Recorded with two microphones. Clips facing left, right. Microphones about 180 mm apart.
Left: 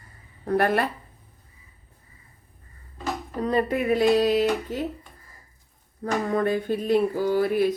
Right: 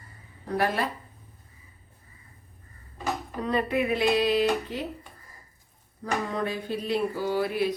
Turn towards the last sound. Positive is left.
turn(degrees=50)  # may be behind; listen again after turning